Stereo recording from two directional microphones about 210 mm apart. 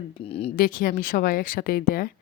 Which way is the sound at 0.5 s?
40° left (ahead or behind).